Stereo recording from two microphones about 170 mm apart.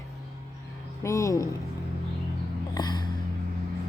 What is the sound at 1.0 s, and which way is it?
Speech, 20° left (ahead or behind).